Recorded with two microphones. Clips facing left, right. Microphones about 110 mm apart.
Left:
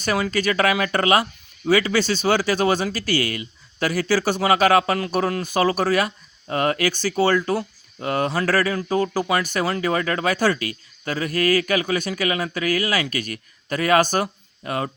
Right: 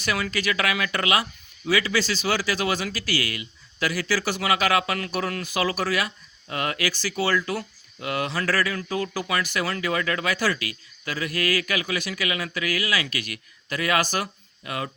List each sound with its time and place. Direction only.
0.0 s speech: 40° left (ahead or behind)
9.4 s speech: 45° left (ahead or behind)
9.6 s speech: 35° left (ahead or behind)